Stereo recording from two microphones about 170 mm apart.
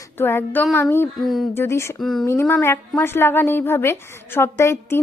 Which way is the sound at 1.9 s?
Centre (ahead or behind).